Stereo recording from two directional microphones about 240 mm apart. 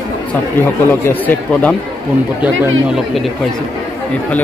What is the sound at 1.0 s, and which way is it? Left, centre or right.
Speech, centre.